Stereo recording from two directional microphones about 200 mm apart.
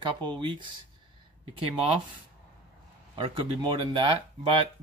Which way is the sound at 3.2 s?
25° right (ahead or behind).